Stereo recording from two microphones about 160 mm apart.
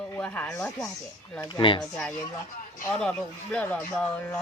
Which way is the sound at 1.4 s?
30° left (ahead or behind).